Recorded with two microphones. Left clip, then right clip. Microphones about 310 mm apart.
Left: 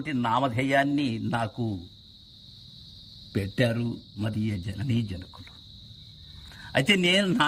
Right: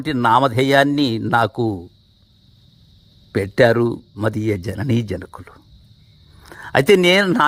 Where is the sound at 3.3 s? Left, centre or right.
Centre.